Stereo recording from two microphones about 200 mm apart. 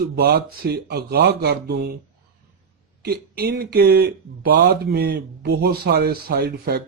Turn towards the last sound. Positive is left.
turn(degrees=-55)  # may be behind; listen again after turning